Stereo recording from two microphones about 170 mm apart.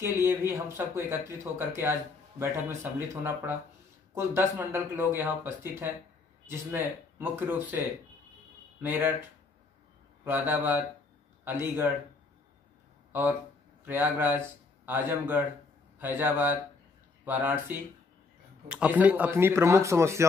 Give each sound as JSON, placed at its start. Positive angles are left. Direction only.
{"t": 0.0, "sound": "speech", "side_deg": -15}
{"t": 8.8, "sound": "speech", "side_deg": -10}
{"t": 10.2, "sound": "speech", "side_deg": -10}
{"t": 13.1, "sound": "speech", "side_deg": -10}